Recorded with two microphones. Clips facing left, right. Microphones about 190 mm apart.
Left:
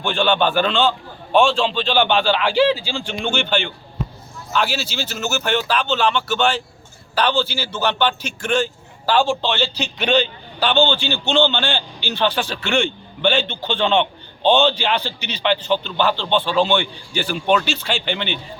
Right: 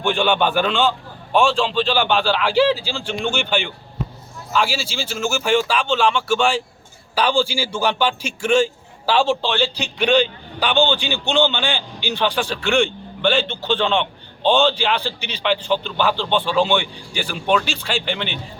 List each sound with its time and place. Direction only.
0.0 s a man's voice: 15° right (ahead or behind)
12.4 s a man's voice: centre (ahead or behind)